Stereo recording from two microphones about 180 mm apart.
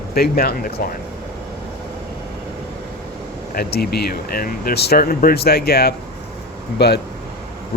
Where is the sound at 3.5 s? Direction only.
60° left (ahead or behind).